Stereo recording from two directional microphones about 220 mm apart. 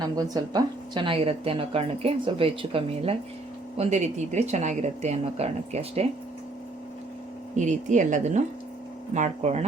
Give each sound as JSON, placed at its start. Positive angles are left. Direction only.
{"t": 0.0, "sound": "a woman's voice", "side_deg": -15}
{"t": 7.5, "sound": "speech", "side_deg": -35}